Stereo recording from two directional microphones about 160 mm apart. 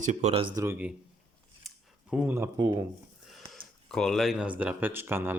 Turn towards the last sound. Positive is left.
turn(degrees=-15)  # may be behind; listen again after turning